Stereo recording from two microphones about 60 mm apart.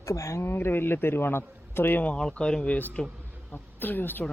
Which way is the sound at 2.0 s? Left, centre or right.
Left.